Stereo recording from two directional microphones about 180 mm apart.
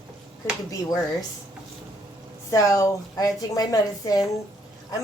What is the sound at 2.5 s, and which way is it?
A woman's voice, 20° left (ahead or behind).